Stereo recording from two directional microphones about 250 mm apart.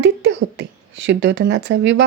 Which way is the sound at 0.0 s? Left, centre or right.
Right.